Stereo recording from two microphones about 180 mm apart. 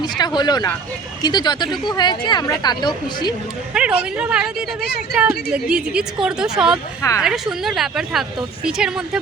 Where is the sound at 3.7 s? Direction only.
5° right (ahead or behind).